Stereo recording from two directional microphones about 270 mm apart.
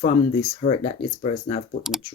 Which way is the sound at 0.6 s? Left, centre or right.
Left.